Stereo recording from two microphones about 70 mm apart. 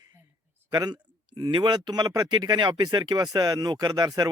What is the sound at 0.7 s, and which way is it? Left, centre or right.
Speech, right.